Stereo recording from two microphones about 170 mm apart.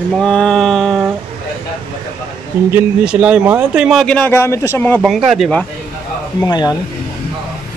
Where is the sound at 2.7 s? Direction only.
10° right (ahead or behind).